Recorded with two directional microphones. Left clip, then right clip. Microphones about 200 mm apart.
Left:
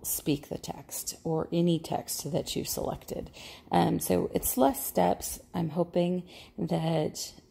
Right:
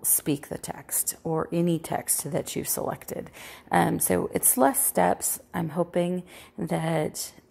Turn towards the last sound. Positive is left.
turn(degrees=0)  # may be behind; listen again after turning